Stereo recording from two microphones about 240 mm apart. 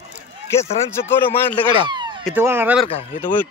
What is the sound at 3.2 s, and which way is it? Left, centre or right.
Speech, centre.